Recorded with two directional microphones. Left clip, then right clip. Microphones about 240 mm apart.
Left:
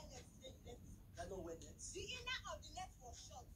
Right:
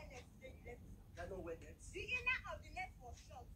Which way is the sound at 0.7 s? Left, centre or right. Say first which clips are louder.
Right 3 dB; centre.